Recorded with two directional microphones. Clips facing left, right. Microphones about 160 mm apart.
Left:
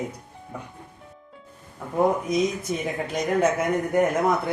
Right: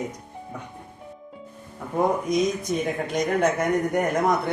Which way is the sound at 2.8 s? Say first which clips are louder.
Right 2 dB; 5° left (ahead or behind).